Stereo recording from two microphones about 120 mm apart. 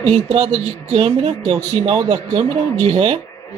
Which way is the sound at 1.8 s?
35° right (ahead or behind).